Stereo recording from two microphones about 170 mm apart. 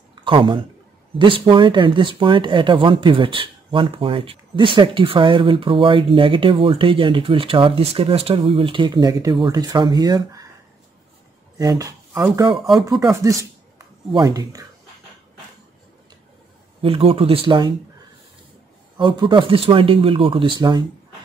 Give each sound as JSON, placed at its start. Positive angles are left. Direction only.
{"t": 0.1, "sound": "speech", "side_deg": -30}
{"t": 11.5, "sound": "a sound", "side_deg": -20}
{"t": 13.1, "sound": "speech", "side_deg": -20}
{"t": 16.8, "sound": "speech", "side_deg": -30}
{"t": 18.9, "sound": "speech", "side_deg": -25}